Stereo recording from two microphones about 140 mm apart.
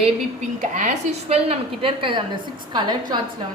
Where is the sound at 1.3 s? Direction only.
40° right (ahead or behind).